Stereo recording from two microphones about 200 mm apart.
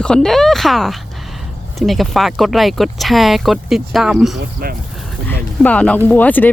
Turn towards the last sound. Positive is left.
turn(degrees=10)  # may be behind; listen again after turning